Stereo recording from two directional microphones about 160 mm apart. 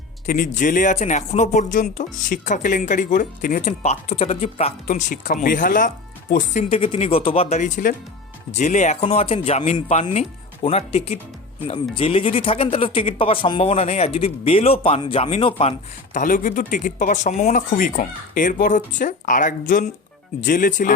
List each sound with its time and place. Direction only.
0.3 s speech: 55° left (ahead or behind); by 7.6 s 35° left (ahead or behind)
7.6 s speech: 60° left (ahead or behind)
8.5 s speech: 50° left (ahead or behind)
16.1 s speech: 55° left (ahead or behind)